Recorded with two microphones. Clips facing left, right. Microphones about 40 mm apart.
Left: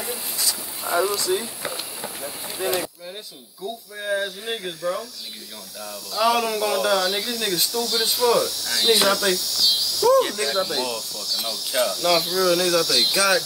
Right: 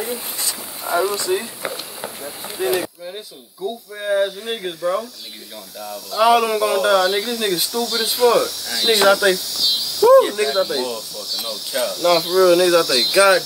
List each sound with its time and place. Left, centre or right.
1.1 s speech: right
2.6 s speech: right
3.6 s speech: centre
6.1 s speech: centre